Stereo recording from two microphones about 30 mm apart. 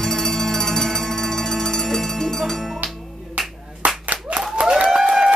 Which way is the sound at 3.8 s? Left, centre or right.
Right.